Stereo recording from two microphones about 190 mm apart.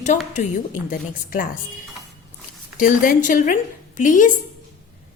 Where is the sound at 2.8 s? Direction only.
45° left (ahead or behind).